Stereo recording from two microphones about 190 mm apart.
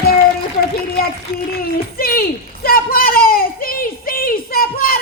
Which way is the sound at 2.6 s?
50° left (ahead or behind).